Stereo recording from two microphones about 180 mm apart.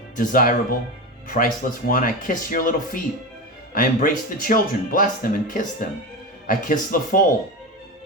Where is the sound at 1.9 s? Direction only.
50° left (ahead or behind).